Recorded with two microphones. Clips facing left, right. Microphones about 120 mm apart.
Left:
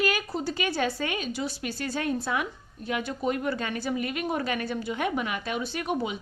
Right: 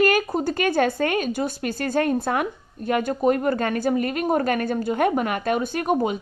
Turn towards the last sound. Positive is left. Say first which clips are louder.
# right 7 dB
turn(degrees=-45)  # may be behind; listen again after turning